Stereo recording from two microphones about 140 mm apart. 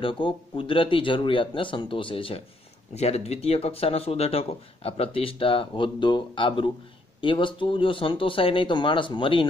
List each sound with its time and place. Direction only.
0.0 s speech: 40° left (ahead or behind)